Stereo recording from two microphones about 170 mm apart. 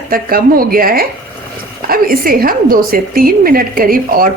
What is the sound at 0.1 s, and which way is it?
A woman's voice, 60° right (ahead or behind).